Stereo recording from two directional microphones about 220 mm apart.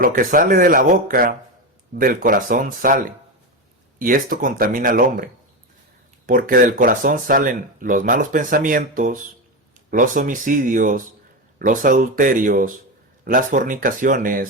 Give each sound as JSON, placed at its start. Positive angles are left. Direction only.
{"t": 0.0, "sound": "speech", "side_deg": -40}
{"t": 6.2, "sound": "speech", "side_deg": -40}